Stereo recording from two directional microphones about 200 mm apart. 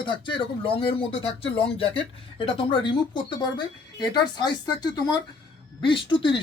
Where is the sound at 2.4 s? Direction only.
25° left (ahead or behind).